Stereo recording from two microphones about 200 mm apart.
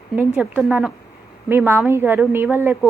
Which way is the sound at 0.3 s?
10° right (ahead or behind).